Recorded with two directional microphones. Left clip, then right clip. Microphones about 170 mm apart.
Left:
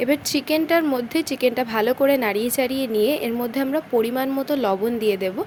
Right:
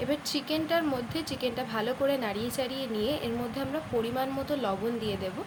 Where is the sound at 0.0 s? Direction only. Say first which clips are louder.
Left 9 dB; 50° left (ahead or behind).